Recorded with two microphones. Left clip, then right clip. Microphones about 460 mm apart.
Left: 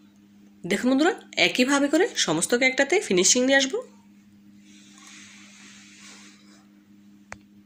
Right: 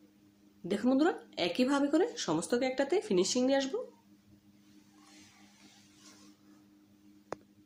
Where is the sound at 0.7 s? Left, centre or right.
Left.